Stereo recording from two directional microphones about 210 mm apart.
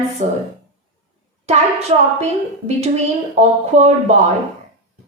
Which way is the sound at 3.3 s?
30° right (ahead or behind).